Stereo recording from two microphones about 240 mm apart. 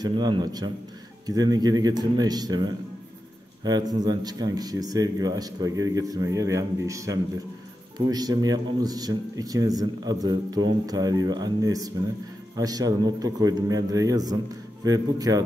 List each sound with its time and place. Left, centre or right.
0.0 s a man's voice: centre